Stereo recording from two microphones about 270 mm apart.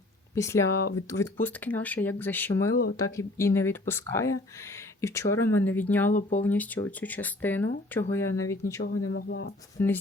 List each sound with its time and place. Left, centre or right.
0.3 s speech: centre
9.0 s speech: left
9.8 s speech: centre